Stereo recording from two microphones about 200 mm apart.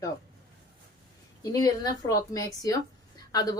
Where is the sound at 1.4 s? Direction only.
15° left (ahead or behind).